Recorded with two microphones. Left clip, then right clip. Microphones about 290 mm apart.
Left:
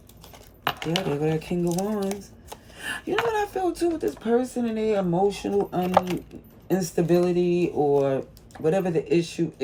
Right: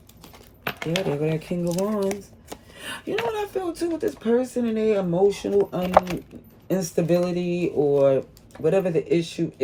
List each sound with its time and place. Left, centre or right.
0.9 s speech: centre
3.3 s speech: centre